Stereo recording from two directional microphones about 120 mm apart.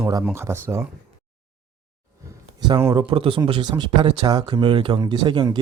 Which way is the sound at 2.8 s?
30° right (ahead or behind).